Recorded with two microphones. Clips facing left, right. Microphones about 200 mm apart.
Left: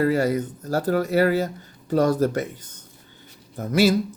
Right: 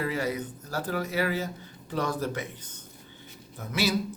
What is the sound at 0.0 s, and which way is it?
Speech, 45° left (ahead or behind).